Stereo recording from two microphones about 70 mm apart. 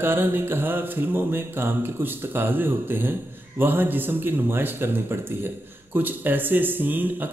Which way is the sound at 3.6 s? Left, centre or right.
Right.